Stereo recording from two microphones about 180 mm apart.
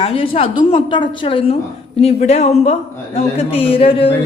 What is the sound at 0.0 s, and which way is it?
A woman's voice, 30° left (ahead or behind).